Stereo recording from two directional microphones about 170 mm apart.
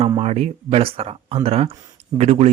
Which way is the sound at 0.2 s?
35° right (ahead or behind).